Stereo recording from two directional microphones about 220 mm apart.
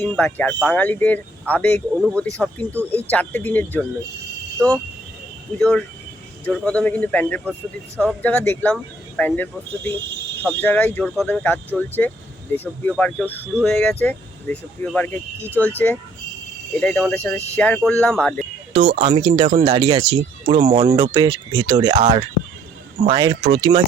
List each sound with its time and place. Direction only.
0.0 s speech: 5° left (ahead or behind)
18.9 s speech: 25° right (ahead or behind)
19.7 s speech: 20° right (ahead or behind)